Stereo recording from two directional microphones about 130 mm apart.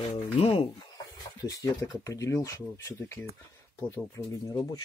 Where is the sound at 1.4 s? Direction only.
30° left (ahead or behind).